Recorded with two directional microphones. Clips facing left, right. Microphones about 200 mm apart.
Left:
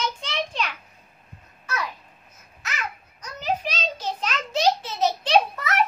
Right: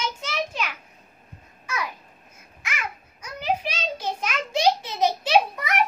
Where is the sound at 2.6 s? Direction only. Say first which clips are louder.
Even; 10° right (ahead or behind).